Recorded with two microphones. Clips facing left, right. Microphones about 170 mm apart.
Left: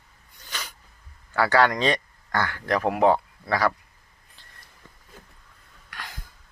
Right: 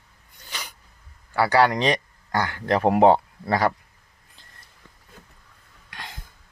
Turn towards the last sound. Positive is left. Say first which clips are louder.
# right 1 dB
turn(degrees=-25)  # may be behind; listen again after turning